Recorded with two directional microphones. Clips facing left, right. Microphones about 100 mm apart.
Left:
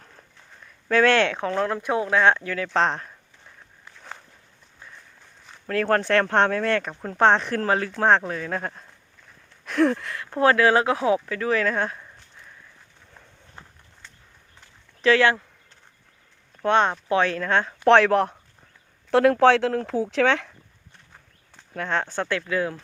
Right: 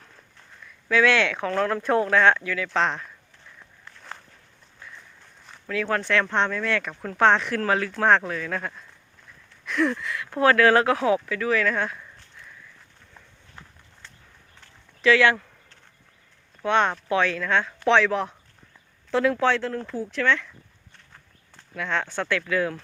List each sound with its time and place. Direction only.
0.9 s speech: 40° left (ahead or behind); by 2.4 s 20° left (ahead or behind)
2.4 s speech: 35° left (ahead or behind)
3.8 s walk: 5° left (ahead or behind)
5.6 s speech: 50° left (ahead or behind); by 8.8 s 35° left (ahead or behind)
9.6 s a sound: 45° left (ahead or behind)
10.2 s speech: 25° left (ahead or behind)
15.0 s speech: 35° left (ahead or behind)
16.6 s speech: 30° left (ahead or behind)
17.8 s speech: 55° left (ahead or behind)
20.1 s speech: 85° left
21.8 s speech: 40° left (ahead or behind)